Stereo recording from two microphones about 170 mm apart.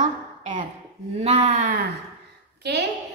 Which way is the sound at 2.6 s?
90° right.